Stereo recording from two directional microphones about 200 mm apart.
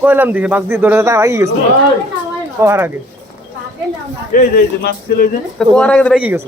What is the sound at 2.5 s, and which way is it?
Speech, 10° right (ahead or behind).